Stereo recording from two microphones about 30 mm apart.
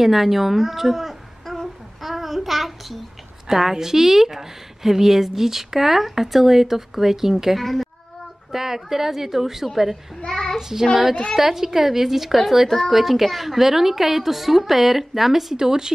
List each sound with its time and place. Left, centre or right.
0.0 s a woman's voice: centre
1.5 s child singing: centre
3.4 s a woman's voice: centre
7.5 s a woman's voice: centre
8.5 s a woman's voice: centre
10.2 s child singing: left
11.3 s a woman's voice: centre
15.5 s speech: right